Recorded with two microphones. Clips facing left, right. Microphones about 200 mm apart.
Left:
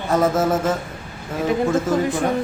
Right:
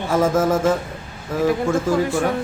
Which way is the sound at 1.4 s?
20° left (ahead or behind).